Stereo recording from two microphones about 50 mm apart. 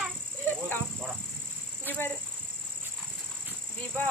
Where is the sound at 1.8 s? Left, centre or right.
Left.